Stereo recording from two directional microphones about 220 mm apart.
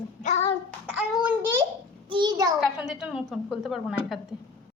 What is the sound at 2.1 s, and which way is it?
Speech, 20° right (ahead or behind).